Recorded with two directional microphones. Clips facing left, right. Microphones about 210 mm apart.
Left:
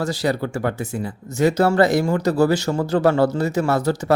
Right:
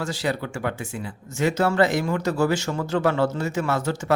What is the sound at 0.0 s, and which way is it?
Speech, 40° left (ahead or behind).